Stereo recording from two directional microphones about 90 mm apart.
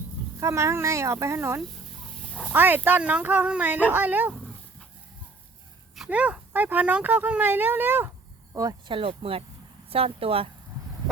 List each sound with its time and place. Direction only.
0.3 s speech: 30° right (ahead or behind)
6.1 s speech: 15° right (ahead or behind)
8.9 s speech: 85° right